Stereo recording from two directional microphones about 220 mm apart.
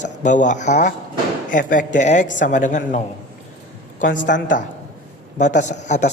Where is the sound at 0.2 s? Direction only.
35° left (ahead or behind).